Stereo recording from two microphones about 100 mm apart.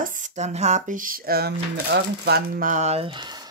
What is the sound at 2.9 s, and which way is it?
Speech, 85° right.